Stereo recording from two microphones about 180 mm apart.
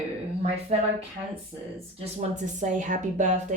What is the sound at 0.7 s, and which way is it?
Speech, 35° right (ahead or behind).